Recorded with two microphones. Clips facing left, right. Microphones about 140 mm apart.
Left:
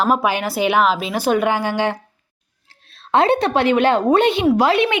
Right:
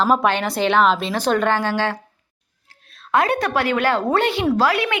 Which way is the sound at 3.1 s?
25° left (ahead or behind).